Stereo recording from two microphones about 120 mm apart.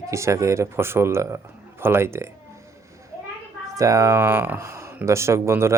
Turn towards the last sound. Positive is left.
turn(degrees=-20)  # may be behind; listen again after turning